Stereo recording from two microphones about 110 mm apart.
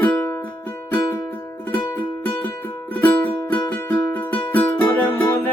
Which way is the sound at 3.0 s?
20° left (ahead or behind).